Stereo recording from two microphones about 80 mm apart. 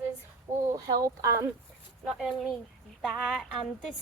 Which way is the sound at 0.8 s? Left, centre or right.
Right.